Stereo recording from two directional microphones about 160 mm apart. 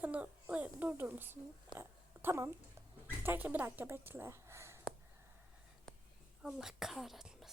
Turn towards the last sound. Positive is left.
turn(degrees=0)  # may be behind; listen again after turning